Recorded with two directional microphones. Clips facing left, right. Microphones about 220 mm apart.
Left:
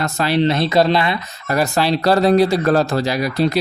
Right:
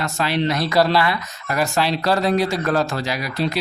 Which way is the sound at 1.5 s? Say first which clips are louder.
Left 3 dB; 35° left (ahead or behind).